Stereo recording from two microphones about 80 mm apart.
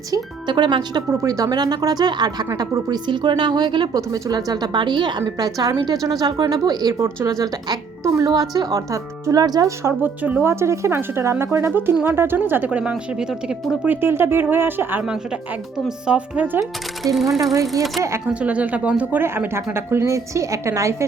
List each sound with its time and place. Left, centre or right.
0.4 s a woman's voice: right
1.1 s a woman's voice: right
3.9 s speech: right
5.4 s speech: right
9.8 s a woman's voice: right
10.4 s a woman's voice: right; by 13.7 s centre
13.8 s a woman's voice: right
15.0 s speech: centre
17.0 s speech: right
18.3 s speech: centre
19.2 s a woman's voice: right